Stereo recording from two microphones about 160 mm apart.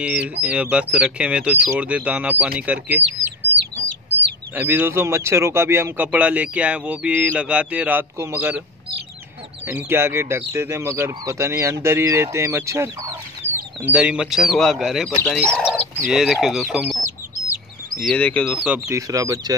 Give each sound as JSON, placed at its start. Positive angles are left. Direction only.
{"t": 0.0, "sound": "a man's voice", "side_deg": -5}
{"t": 4.6, "sound": "a man's voice", "side_deg": -10}
{"t": 9.7, "sound": "a man's voice", "side_deg": -15}
{"t": 13.8, "sound": "speech", "side_deg": -5}
{"t": 15.5, "sound": "fowl", "side_deg": 5}
{"t": 16.1, "sound": "speech", "side_deg": -5}
{"t": 17.9, "sound": "speech", "side_deg": 5}
{"t": 18.9, "sound": "speech", "side_deg": -20}